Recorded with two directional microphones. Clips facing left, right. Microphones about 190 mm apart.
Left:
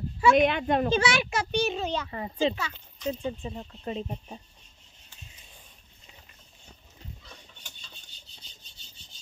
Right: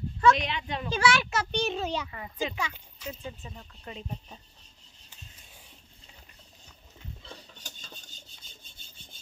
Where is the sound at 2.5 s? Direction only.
10° right (ahead or behind).